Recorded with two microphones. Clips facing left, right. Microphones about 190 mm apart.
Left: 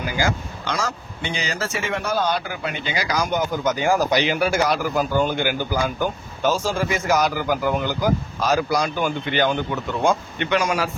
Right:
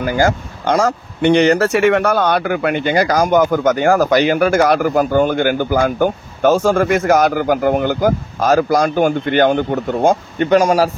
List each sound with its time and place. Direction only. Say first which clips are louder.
0.0 s speech: right 8 dB; 50° right (ahead or behind)